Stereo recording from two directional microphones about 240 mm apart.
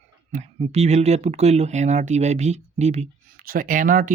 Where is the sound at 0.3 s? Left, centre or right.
Right.